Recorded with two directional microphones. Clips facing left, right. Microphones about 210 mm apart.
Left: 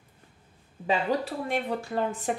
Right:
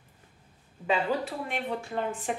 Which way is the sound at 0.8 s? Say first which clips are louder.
Left 1 dB; 40° left (ahead or behind).